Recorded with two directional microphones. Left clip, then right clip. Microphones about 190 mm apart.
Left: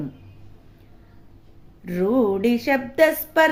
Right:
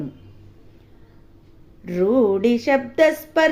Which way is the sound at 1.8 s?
20° left (ahead or behind).